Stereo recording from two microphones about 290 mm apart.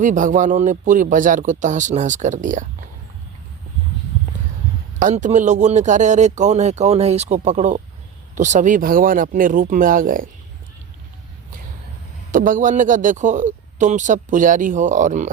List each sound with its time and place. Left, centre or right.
0.0 s a man's voice: right
4.9 s a man's voice: right
12.3 s a man's voice: right